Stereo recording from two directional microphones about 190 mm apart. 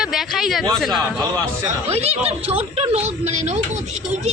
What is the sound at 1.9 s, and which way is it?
A woman's voice, 30° right (ahead or behind).